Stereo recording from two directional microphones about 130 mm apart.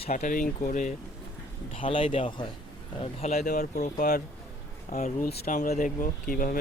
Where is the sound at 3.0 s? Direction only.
55° left (ahead or behind).